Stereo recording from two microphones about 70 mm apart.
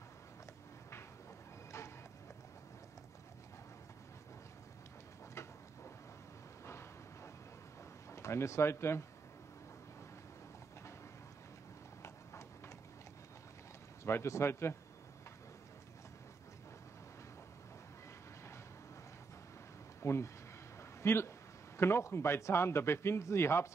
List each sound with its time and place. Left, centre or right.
6.6 s a sound: left
8.1 s speech: left
12.0 s clip-clop: left
14.0 s a man's voice: left
20.0 s a man's voice: left